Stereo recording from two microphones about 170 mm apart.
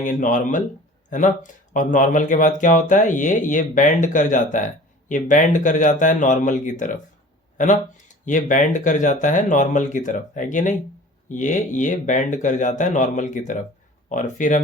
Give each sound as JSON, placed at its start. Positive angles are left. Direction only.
{"t": 0.0, "sound": "speech", "side_deg": 50}